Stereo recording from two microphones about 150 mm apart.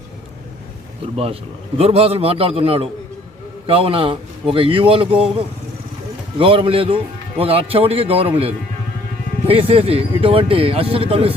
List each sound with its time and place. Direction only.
1.1 s a man's voice: 40° right (ahead or behind)
6.4 s a man's voice: 35° right (ahead or behind)